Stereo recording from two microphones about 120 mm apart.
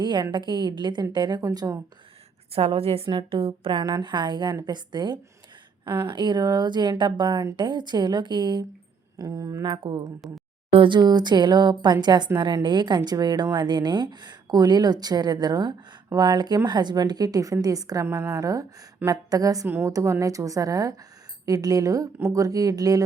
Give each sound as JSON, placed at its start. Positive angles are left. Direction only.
{"t": 0.0, "sound": "speech", "side_deg": -40}
{"t": 2.6, "sound": "a woman's voice", "side_deg": -55}
{"t": 9.1, "sound": "a woman's voice", "side_deg": -30}